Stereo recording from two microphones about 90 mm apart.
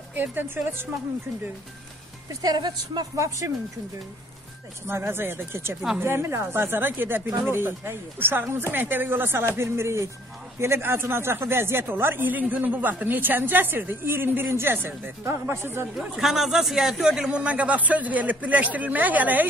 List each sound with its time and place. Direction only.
0.1 s a woman's voice: 20° right (ahead or behind)
2.4 s a woman's voice: 50° right (ahead or behind)
3.2 s speech: 35° right (ahead or behind)
4.8 s a woman's voice: 25° right (ahead or behind)
16.2 s a man's voice: 5° right (ahead or behind); by 19.4 s 20° right (ahead or behind)